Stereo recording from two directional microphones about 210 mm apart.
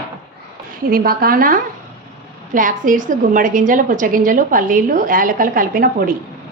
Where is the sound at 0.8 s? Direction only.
45° right (ahead or behind).